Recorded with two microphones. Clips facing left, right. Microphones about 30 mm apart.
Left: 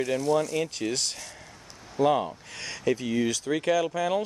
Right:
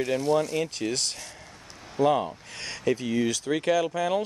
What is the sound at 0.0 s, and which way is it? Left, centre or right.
Speech, centre.